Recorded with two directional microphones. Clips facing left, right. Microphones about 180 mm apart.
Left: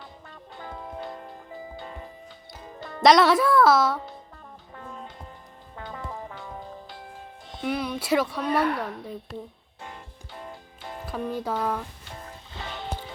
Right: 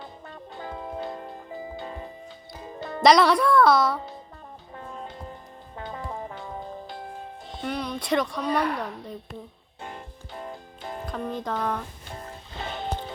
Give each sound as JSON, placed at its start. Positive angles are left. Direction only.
{"t": 0.8, "sound": "music", "side_deg": -25}
{"t": 3.0, "sound": "speech", "side_deg": 0}
{"t": 5.8, "sound": "music", "side_deg": -25}
{"t": 7.6, "sound": "speech", "side_deg": 5}
{"t": 11.0, "sound": "speech", "side_deg": 5}
{"t": 12.6, "sound": "music", "side_deg": -50}